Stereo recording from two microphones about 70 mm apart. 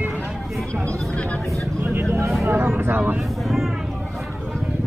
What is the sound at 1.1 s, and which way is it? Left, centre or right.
Speech, centre.